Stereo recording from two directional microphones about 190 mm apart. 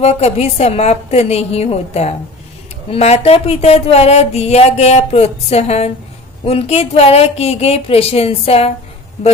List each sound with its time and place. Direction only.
0.0 s speech: 35° left (ahead or behind)